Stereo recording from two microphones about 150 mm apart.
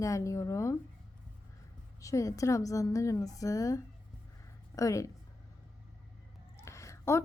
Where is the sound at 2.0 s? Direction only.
20° left (ahead or behind).